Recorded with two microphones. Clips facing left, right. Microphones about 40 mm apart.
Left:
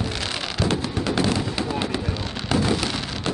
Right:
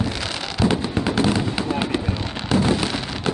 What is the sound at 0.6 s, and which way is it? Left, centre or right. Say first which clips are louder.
Fireworks: right 4 dB; centre.